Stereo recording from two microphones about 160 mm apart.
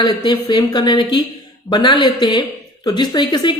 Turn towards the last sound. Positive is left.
turn(degrees=30)  # may be behind; listen again after turning